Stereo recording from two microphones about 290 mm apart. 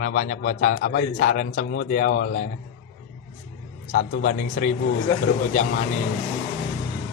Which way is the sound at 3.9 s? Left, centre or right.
Left.